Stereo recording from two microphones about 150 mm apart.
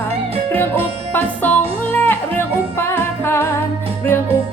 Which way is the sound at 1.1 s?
10° left (ahead or behind).